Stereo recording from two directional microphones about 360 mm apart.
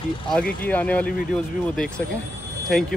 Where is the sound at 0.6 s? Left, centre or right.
Centre.